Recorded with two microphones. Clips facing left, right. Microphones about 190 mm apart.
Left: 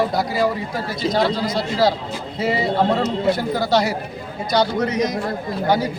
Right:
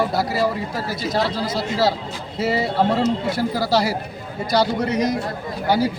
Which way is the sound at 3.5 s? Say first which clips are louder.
Left 1 dB; 5° right (ahead or behind).